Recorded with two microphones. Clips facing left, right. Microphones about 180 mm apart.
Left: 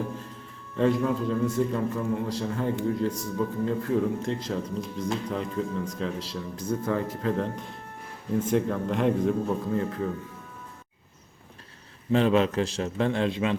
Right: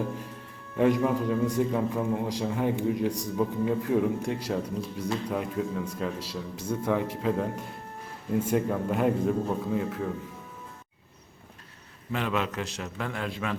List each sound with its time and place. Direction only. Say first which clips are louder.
0.8 s speech: even; 15° right (ahead or behind)
12.1 s a man's voice: left 8 dB; 30° left (ahead or behind)